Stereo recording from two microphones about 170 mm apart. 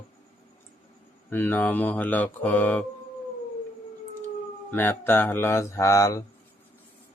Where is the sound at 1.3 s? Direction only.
10° left (ahead or behind).